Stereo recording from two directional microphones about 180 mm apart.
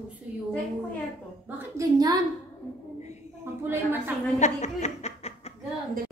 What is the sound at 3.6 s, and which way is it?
Speech, 15° right (ahead or behind).